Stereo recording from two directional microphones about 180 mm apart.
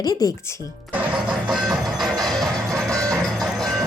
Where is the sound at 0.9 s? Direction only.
5° right (ahead or behind).